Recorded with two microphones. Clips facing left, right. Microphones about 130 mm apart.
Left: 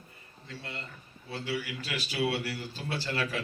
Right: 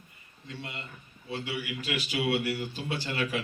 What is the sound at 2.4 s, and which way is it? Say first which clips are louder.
Speech: right 5 dB; 15° right (ahead or behind).